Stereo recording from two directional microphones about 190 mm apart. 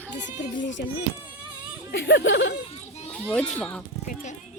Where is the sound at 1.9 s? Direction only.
65° left (ahead or behind).